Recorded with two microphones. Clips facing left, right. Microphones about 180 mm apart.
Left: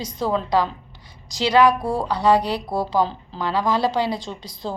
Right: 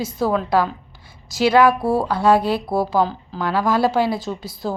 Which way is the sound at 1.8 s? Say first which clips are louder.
Right 4 dB; 5° right (ahead or behind).